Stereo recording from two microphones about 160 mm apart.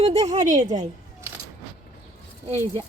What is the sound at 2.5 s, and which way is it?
Speech, 15° left (ahead or behind).